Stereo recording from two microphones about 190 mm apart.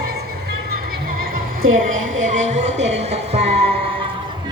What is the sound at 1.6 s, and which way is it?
Speech, 90° right.